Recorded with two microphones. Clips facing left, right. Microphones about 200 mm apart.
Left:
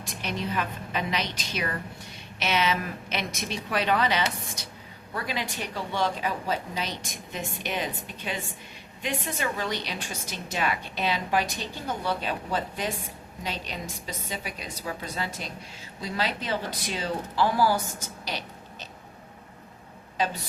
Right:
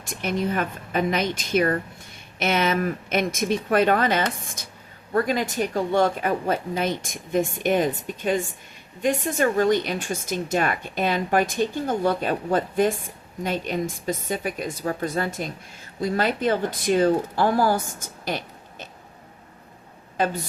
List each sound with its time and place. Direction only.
0.0 s a woman's voice: 50° right (ahead or behind)
18.3 s a sound: 50° right (ahead or behind)
20.2 s a woman's voice: 55° right (ahead or behind)